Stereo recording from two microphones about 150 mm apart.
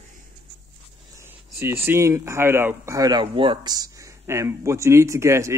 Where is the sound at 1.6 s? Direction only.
15° right (ahead or behind).